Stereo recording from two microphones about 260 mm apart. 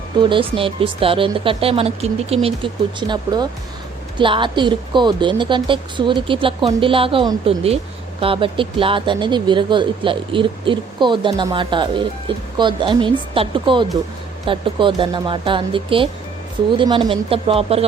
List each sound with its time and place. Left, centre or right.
0.3 s a woman's voice: centre